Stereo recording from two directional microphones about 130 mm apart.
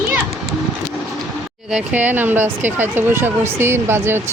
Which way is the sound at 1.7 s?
10° right (ahead or behind).